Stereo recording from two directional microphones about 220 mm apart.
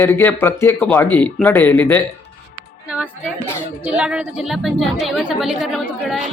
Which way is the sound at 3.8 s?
5° right (ahead or behind).